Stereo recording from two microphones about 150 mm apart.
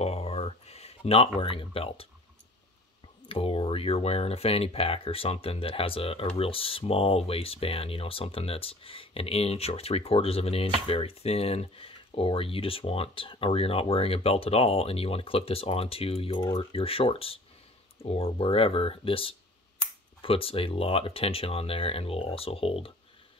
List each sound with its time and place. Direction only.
0.0 s a sound: 40° left (ahead or behind)
3.3 s speech: 40° left (ahead or behind)
16.3 s speech: 30° left (ahead or behind)